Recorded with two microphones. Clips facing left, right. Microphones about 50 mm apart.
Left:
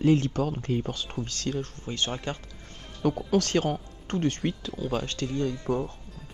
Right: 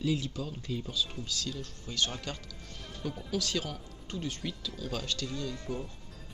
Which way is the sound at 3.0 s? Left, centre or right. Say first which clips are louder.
Left 10 dB; left.